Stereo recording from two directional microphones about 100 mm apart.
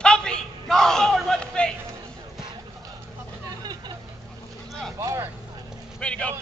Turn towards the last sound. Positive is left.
turn(degrees=10)  # may be behind; listen again after turning